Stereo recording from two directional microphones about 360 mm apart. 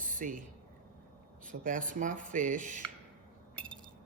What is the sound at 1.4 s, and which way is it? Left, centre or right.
A man's voice, right.